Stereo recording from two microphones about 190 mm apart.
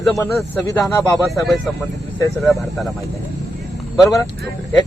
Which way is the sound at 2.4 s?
Centre (ahead or behind).